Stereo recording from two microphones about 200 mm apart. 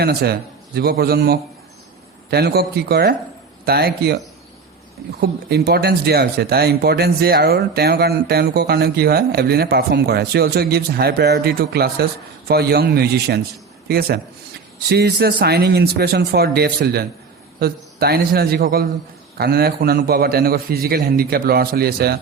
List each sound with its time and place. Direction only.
0.0 s speech: 50° right (ahead or behind)
5.2 s speech: 50° right (ahead or behind)